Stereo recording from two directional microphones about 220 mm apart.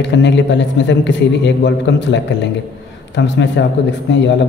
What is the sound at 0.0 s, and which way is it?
A man's voice, 55° left (ahead or behind).